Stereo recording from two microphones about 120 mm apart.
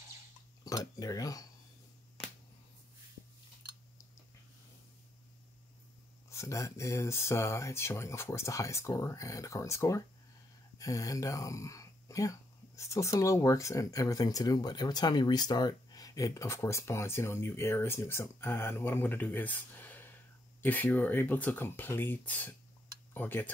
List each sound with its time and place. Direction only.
0.7 s speech: 30° left (ahead or behind)
6.3 s speech: 25° left (ahead or behind)